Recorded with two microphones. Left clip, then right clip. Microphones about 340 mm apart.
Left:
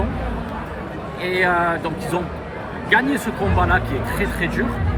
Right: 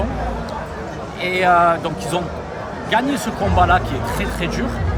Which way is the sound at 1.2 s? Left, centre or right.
Centre.